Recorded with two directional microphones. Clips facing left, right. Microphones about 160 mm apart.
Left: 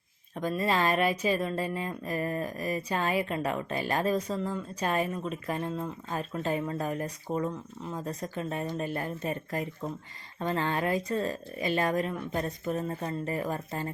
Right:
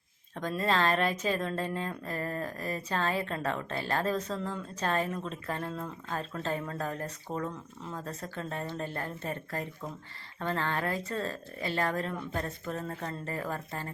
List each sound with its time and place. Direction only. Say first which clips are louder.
0.3 s speech: left 1 dB; 5° left (ahead or behind)